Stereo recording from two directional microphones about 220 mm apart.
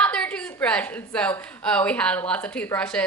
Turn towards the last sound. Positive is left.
turn(degrees=5)  # may be behind; listen again after turning